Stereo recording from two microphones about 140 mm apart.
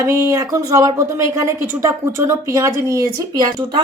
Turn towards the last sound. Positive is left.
turn(degrees=-30)  # may be behind; listen again after turning